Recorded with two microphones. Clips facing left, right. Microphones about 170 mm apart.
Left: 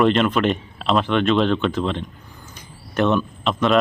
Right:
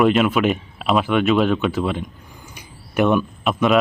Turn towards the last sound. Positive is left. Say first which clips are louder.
# right 1 dB
turn(degrees=-5)  # may be behind; listen again after turning